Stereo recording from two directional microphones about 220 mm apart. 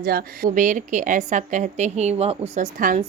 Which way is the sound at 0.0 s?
45° right (ahead or behind).